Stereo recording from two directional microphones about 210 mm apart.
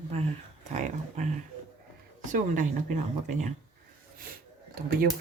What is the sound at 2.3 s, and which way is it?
Speech, 35° right (ahead or behind).